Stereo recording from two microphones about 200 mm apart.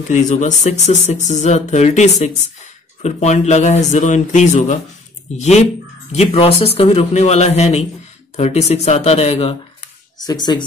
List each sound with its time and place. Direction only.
0.1 s speech: 35° left (ahead or behind); by 10.6 s 20° left (ahead or behind)